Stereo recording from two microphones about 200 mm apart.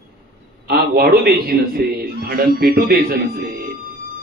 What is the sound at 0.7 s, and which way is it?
A man's voice, 50° right (ahead or behind).